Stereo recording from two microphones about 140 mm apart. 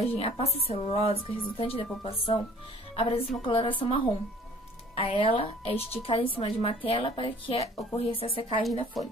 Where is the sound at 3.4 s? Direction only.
40° left (ahead or behind).